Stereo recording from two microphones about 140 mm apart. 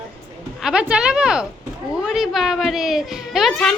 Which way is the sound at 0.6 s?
5° right (ahead or behind).